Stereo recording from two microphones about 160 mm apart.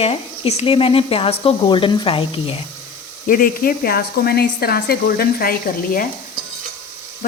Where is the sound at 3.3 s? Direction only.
65° left (ahead or behind).